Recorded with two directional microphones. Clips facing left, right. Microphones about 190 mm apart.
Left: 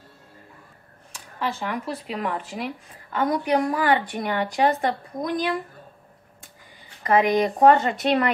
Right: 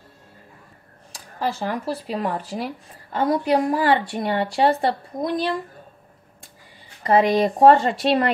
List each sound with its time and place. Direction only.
1.1 s speech: 35° right (ahead or behind)
7.0 s speech: 30° right (ahead or behind)